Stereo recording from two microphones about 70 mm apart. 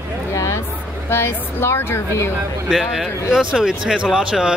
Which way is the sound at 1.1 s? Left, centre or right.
Left.